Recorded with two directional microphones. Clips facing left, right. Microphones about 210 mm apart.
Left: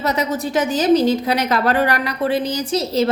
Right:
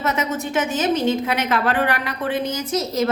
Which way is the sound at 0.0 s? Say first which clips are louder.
Left 3 dB; 35° left (ahead or behind).